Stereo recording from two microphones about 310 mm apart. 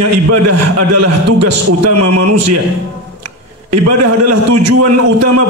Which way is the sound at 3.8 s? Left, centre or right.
Right.